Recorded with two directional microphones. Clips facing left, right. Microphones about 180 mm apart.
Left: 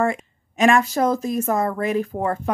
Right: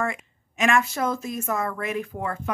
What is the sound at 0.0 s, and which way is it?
Speech, 35° left (ahead or behind).